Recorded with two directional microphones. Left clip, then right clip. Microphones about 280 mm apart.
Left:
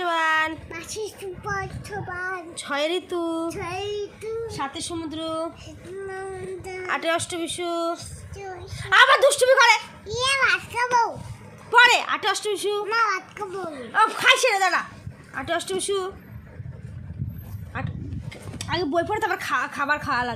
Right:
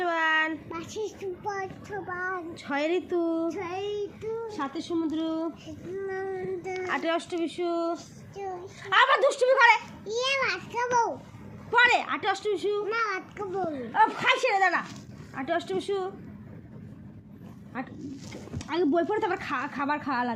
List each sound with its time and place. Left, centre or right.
0.0 s a child's voice: centre
3.5 s child singing: centre
4.4 s speech: centre
6.8 s a child's voice: left
17.7 s a child's voice: left